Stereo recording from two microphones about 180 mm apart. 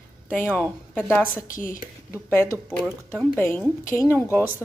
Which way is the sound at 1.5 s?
50° left (ahead or behind).